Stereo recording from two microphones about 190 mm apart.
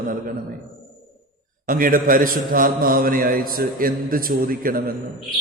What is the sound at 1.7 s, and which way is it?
A man's voice, 45° right (ahead or behind).